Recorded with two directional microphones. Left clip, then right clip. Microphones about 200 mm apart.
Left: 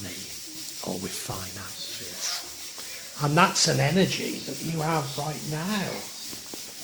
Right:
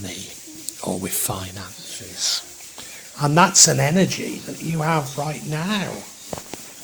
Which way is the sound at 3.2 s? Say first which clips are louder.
Right 6 dB; 40° right (ahead or behind).